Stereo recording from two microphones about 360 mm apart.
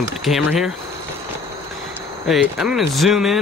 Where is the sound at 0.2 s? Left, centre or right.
Centre.